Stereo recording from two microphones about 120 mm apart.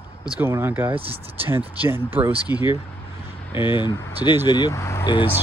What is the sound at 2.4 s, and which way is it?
Speech, 35° left (ahead or behind).